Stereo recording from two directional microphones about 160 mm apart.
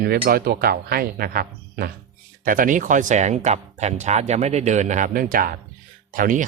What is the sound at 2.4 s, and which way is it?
Speech, 60° right (ahead or behind).